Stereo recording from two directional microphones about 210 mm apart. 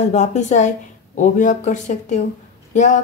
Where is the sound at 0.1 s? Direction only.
35° left (ahead or behind).